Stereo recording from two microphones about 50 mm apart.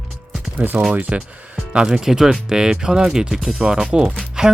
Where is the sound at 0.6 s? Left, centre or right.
Right.